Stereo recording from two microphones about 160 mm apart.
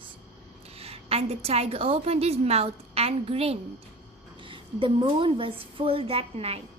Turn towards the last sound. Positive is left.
turn(degrees=-40)  # may be behind; listen again after turning